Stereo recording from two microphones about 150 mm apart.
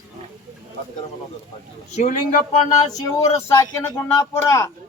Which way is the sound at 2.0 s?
55° left (ahead or behind).